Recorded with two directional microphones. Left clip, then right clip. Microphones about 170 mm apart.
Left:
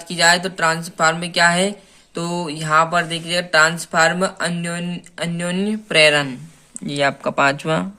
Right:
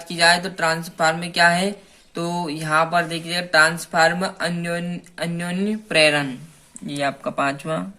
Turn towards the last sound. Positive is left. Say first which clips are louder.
# left 6 dB
turn(degrees=40)  # may be behind; listen again after turning